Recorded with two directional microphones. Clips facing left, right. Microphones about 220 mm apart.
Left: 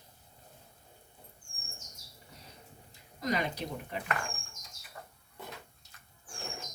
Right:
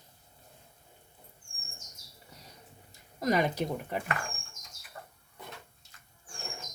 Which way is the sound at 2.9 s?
50° right (ahead or behind).